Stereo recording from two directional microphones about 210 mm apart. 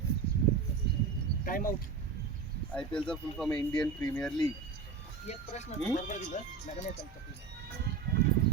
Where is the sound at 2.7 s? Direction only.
5° left (ahead or behind).